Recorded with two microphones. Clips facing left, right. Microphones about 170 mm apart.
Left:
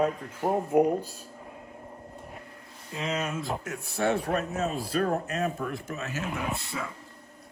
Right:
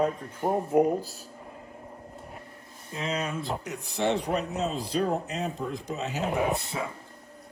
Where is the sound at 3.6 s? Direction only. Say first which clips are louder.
Even; 15° right (ahead or behind).